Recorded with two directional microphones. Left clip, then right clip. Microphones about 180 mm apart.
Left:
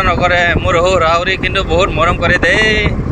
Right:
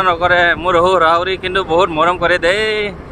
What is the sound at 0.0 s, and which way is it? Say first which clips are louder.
Speech: even; 20° right (ahead or behind).